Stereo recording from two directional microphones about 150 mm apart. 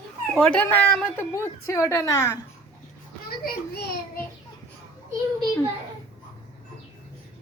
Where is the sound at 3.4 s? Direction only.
90° left.